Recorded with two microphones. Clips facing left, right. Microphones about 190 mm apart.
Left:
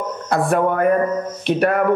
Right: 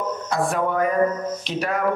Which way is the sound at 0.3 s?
55° left (ahead or behind).